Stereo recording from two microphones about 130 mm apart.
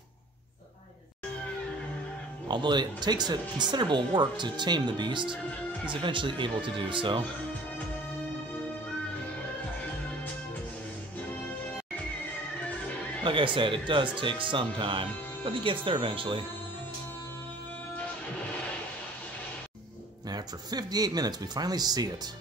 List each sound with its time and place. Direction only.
2.4 s speech: 35° right (ahead or behind)
13.2 s speech: 40° right (ahead or behind)
20.2 s speech: 30° right (ahead or behind)